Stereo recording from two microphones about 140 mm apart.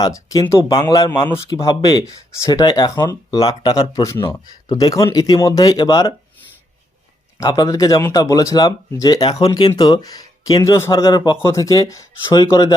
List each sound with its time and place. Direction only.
0.0 s speech: 25° left (ahead or behind)
4.3 s speech: 30° left (ahead or behind)
7.3 s speech: 25° left (ahead or behind)
10.9 s a man's voice: 30° left (ahead or behind)